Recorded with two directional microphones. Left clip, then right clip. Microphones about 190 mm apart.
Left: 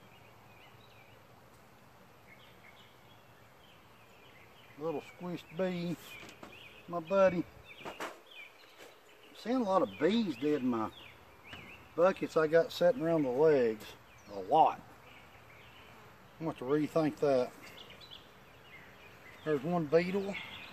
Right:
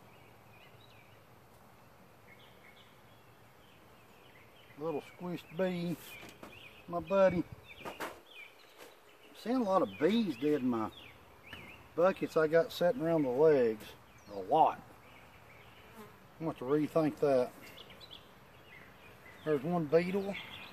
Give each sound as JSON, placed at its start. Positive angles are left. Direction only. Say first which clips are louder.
{"t": 4.8, "sound": "speech", "louder": "even", "side_deg": -15}
{"t": 6.4, "sound": "a sound", "louder": "even", "side_deg": -20}
{"t": 9.4, "sound": "speech", "louder": "even", "side_deg": -10}
{"t": 12.0, "sound": "speech", "louder": "left 1 dB", "side_deg": -10}
{"t": 16.3, "sound": "speech", "louder": "even", "side_deg": 0}
{"t": 17.6, "sound": "a sound", "louder": "left 1 dB", "side_deg": -45}
{"t": 19.4, "sound": "speech", "louder": "even", "side_deg": 0}